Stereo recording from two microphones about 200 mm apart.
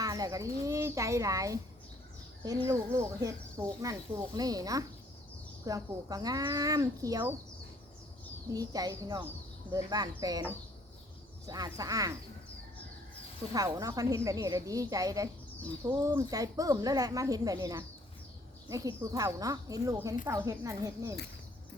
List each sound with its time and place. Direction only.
0.0 s a child's voice: 20° right (ahead or behind)
2.6 s speech: 15° right (ahead or behind)
8.4 s speech: 20° right (ahead or behind)
13.5 s speech: 20° right (ahead or behind)